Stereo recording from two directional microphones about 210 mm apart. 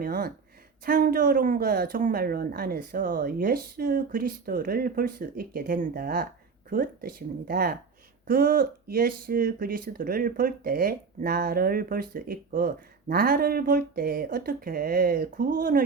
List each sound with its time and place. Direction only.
0.0 s speech: 45° right (ahead or behind)